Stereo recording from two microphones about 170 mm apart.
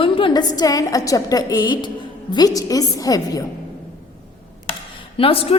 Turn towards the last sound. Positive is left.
turn(degrees=35)  # may be behind; listen again after turning